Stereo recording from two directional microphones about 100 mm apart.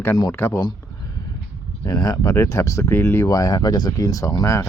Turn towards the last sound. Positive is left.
turn(degrees=35)  # may be behind; listen again after turning